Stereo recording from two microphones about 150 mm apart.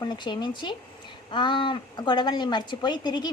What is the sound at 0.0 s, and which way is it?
Speech, 30° left (ahead or behind).